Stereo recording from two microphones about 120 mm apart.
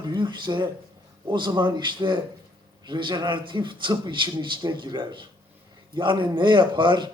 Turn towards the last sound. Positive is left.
turn(degrees=-40)  # may be behind; listen again after turning